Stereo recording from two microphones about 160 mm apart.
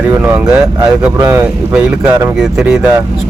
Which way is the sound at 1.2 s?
15° right (ahead or behind).